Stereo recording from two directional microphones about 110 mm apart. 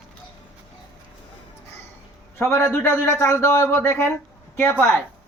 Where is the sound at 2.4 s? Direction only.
20° left (ahead or behind).